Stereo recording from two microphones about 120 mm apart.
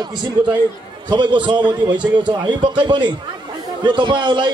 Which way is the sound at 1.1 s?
40° right (ahead or behind).